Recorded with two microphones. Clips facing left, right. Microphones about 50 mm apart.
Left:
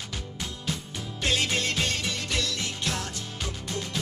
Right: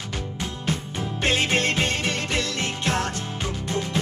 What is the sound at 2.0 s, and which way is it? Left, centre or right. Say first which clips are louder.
Music: right 5 dB; right.